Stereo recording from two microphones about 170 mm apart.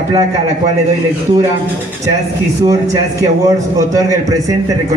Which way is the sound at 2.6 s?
20° right (ahead or behind).